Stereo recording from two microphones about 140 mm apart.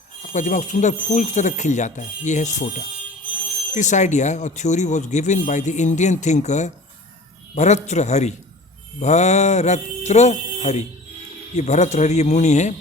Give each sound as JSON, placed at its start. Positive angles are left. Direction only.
{"t": 0.3, "sound": "speech", "side_deg": 60}